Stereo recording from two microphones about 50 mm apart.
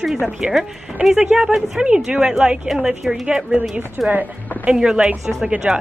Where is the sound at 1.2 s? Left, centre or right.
Centre.